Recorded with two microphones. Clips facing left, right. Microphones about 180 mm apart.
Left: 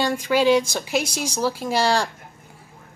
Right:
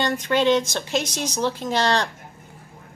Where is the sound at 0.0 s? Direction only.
10° left (ahead or behind).